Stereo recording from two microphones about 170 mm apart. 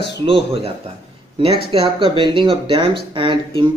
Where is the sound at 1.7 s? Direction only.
30° right (ahead or behind).